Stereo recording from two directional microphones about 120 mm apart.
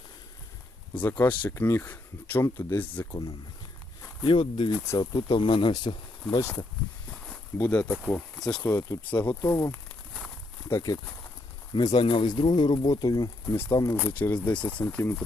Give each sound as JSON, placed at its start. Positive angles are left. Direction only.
{"t": 0.9, "sound": "speech", "side_deg": 15}
{"t": 4.2, "sound": "speech", "side_deg": 45}
{"t": 4.9, "sound": "speech", "side_deg": 35}
{"t": 6.4, "sound": "speech", "side_deg": 20}
{"t": 7.6, "sound": "speech", "side_deg": 10}
{"t": 9.3, "sound": "speech", "side_deg": 25}
{"t": 11.9, "sound": "speech", "side_deg": 45}
{"t": 14.1, "sound": "speech", "side_deg": 15}